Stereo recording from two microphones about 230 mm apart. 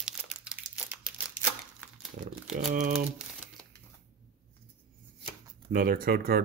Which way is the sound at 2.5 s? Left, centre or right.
Right.